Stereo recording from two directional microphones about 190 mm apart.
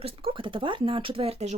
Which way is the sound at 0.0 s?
30° right (ahead or behind).